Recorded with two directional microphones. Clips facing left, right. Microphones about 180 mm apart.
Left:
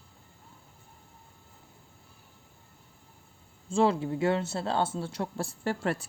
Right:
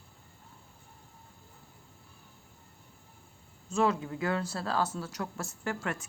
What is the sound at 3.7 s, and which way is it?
Speech, 30° left (ahead or behind).